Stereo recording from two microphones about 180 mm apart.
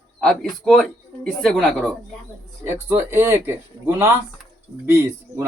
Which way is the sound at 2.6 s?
15° right (ahead or behind).